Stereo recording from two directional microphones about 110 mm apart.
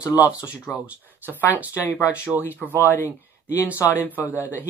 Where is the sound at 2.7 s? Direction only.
20° left (ahead or behind).